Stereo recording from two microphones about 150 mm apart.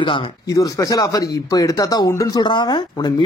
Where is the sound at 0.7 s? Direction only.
20° left (ahead or behind).